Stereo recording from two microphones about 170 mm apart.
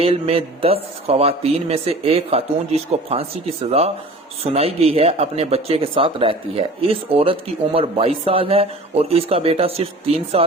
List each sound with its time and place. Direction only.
0.0 s speech: 35° right (ahead or behind)